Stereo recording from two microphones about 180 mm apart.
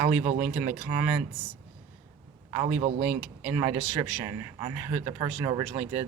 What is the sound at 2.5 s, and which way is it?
A man's voice, 10° right (ahead or behind).